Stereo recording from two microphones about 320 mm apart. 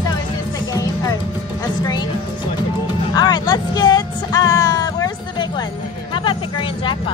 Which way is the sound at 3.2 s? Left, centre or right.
Centre.